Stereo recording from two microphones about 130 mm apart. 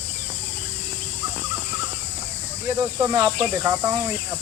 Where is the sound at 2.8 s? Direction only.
20° right (ahead or behind).